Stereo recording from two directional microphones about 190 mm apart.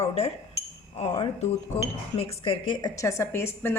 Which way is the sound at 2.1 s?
25° left (ahead or behind).